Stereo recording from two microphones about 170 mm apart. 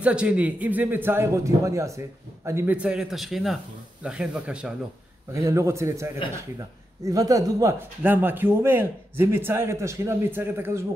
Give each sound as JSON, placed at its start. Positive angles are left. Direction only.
{"t": 0.0, "sound": "a man's voice", "side_deg": -5}
{"t": 5.3, "sound": "speech", "side_deg": -15}